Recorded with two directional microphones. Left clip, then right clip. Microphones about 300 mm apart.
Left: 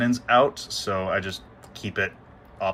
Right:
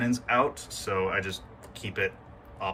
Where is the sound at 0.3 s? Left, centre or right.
Centre.